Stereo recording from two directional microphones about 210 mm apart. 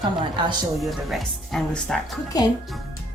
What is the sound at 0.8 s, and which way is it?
Speech, centre (ahead or behind).